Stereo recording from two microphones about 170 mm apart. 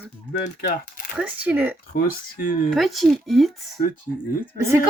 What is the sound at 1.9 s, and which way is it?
Speech, 60° left (ahead or behind).